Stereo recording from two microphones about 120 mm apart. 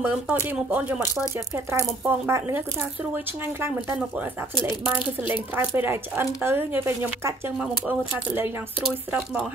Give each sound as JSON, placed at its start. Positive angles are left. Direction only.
{"t": 0.0, "sound": "speech", "side_deg": -15}
{"t": 4.8, "sound": "speech", "side_deg": -15}